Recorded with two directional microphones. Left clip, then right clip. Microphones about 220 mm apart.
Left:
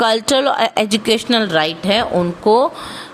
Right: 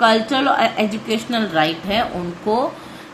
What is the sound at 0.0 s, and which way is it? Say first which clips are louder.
A woman's voice: left 1 dB; 50° left (ahead or behind).